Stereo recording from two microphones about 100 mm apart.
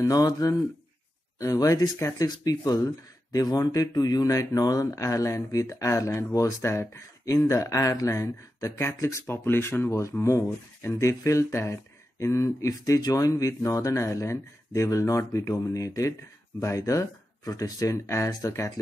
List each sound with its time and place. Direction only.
0.0 s speech: 35° left (ahead or behind)